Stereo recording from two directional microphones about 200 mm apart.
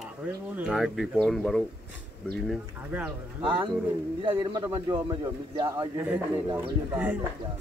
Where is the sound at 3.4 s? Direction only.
25° right (ahead or behind).